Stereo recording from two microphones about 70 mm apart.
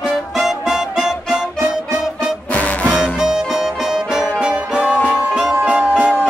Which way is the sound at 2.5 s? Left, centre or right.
Left.